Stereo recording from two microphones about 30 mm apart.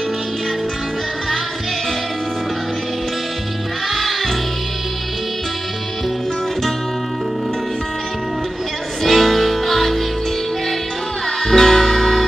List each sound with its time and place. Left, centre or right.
3.9 s music: centre
9.0 s music: centre
11.4 s music: centre